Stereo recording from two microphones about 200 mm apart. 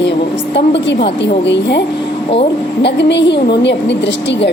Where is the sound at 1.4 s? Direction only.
60° left (ahead or behind).